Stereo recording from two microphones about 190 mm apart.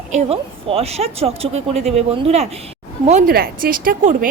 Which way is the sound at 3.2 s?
50° right (ahead or behind).